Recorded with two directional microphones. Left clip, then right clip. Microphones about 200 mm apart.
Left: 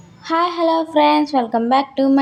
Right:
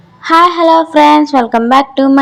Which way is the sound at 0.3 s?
20° right (ahead or behind).